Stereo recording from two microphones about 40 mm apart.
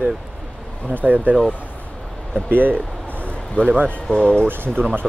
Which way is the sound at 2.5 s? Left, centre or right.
Right.